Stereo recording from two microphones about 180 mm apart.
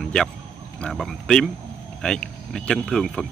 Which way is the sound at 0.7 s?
Centre (ahead or behind).